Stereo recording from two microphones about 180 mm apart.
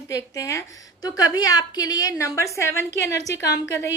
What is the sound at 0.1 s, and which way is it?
A woman's voice, 15° left (ahead or behind).